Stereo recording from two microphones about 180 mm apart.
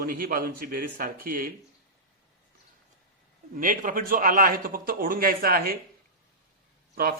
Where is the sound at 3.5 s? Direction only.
50° right (ahead or behind).